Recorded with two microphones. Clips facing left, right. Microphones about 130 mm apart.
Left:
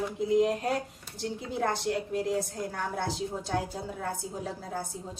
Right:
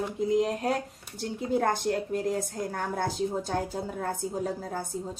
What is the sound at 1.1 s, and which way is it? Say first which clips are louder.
A woman's voice: right 5 dB; 45° right (ahead or behind).